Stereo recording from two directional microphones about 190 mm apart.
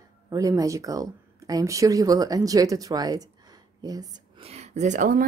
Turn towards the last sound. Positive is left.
turn(degrees=-45)  # may be behind; listen again after turning